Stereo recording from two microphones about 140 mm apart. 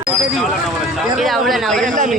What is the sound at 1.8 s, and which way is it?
Speech, 65° right (ahead or behind).